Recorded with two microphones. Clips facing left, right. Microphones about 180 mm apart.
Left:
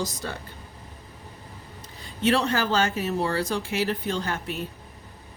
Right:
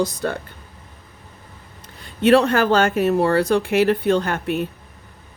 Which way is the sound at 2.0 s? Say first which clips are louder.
Right 9 dB; 65° right (ahead or behind).